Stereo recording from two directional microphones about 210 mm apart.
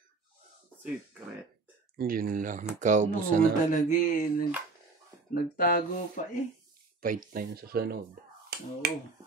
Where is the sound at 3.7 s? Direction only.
35° left (ahead or behind).